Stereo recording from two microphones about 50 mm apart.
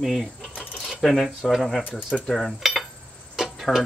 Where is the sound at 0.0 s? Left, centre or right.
Centre.